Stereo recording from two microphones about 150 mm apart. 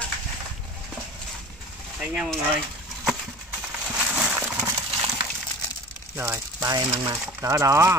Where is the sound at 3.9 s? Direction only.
10° right (ahead or behind).